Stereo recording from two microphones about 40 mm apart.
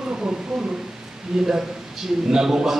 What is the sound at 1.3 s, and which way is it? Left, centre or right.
A man's voice, centre.